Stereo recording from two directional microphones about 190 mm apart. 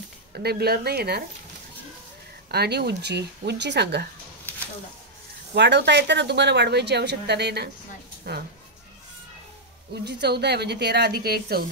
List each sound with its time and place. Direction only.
0.4 s a woman's voice: 55° right (ahead or behind)
2.5 s a woman's voice: 60° right (ahead or behind)
5.5 s a woman's voice: 65° right (ahead or behind)
10.0 s a woman's voice: 60° right (ahead or behind)